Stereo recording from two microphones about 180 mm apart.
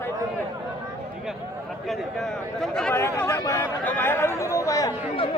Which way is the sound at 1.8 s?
Centre (ahead or behind).